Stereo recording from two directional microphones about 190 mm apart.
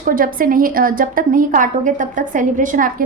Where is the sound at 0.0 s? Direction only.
45° right (ahead or behind).